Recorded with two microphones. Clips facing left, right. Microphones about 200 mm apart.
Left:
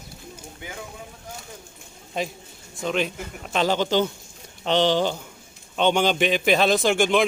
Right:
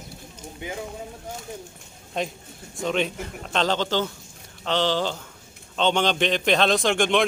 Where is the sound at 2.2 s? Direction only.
Centre (ahead or behind).